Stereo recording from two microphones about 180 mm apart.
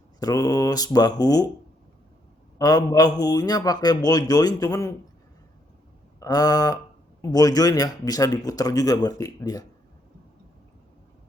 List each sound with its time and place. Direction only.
0.2 s speech: 20° left (ahead or behind)
2.6 s speech: 20° left (ahead or behind)
6.1 s speech: 20° left (ahead or behind)